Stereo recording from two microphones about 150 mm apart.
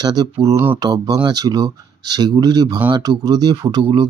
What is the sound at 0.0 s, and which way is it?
Speech, 25° right (ahead or behind).